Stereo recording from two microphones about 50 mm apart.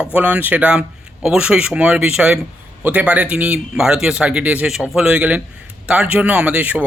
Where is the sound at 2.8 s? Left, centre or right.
Right.